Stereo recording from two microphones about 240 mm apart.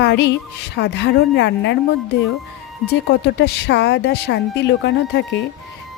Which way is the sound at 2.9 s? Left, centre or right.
Left.